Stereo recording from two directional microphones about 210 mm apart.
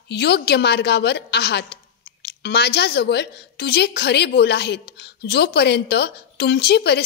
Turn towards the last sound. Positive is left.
turn(degrees=50)  # may be behind; listen again after turning